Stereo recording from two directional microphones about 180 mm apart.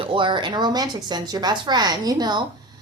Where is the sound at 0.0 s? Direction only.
30° right (ahead or behind).